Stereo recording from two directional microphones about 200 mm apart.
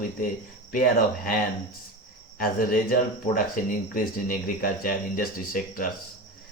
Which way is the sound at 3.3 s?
45° left (ahead or behind).